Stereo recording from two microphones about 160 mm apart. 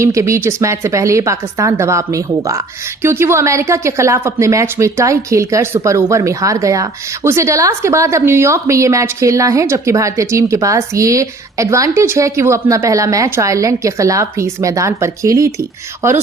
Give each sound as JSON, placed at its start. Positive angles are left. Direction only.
{"t": 0.0, "sound": "speech", "side_deg": -20}